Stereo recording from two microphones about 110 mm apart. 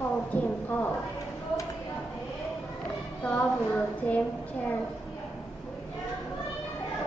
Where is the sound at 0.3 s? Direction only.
15° left (ahead or behind).